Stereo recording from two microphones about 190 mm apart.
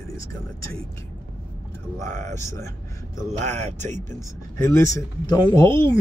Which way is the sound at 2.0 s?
40° right (ahead or behind).